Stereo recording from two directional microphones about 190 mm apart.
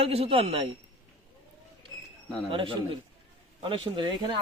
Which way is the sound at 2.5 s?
25° right (ahead or behind).